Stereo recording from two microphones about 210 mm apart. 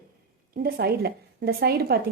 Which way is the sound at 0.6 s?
50° right (ahead or behind).